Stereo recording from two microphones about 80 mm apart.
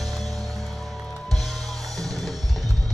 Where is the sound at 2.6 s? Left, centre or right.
Right.